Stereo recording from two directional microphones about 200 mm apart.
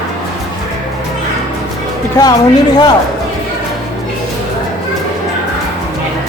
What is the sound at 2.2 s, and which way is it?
Speech, 20° left (ahead or behind).